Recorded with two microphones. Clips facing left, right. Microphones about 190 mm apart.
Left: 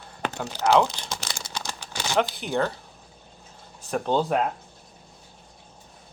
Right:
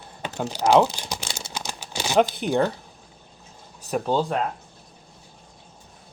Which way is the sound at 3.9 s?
5° right (ahead or behind).